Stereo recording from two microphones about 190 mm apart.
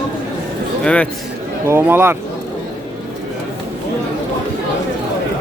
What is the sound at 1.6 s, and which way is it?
Speech, 10° right (ahead or behind).